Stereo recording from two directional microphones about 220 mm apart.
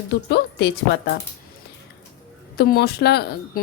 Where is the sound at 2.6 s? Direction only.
45° left (ahead or behind).